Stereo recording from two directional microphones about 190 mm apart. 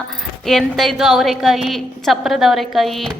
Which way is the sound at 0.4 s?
Centre (ahead or behind).